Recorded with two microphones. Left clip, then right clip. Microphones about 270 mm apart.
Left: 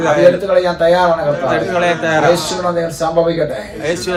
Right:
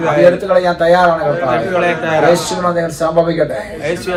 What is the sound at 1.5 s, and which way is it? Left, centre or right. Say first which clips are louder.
Speech: even; left.